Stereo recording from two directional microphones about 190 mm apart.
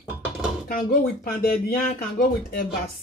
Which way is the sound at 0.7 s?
50° left (ahead or behind).